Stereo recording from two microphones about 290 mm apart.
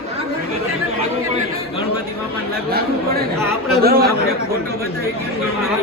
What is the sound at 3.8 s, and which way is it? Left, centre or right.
Speech, right.